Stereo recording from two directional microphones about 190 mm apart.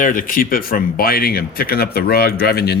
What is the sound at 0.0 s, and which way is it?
Speech, 45° left (ahead or behind).